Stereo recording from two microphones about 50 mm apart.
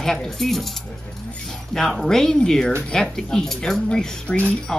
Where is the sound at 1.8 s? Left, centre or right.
Centre.